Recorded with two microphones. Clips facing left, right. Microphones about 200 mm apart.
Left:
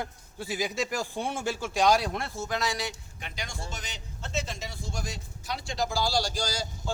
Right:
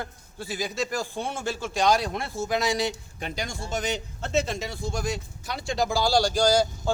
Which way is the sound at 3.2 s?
40° right (ahead or behind).